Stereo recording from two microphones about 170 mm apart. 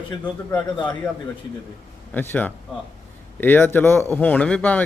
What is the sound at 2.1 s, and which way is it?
Speech, 10° left (ahead or behind).